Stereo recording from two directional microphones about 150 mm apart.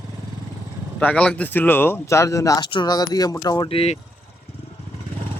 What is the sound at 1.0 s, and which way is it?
Speech, 10° left (ahead or behind).